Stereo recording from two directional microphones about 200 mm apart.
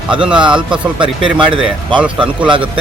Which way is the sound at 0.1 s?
5° right (ahead or behind).